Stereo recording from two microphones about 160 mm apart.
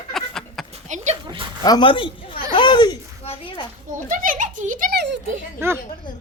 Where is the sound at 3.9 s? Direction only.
55° right (ahead or behind); by 5.2 s 90° right.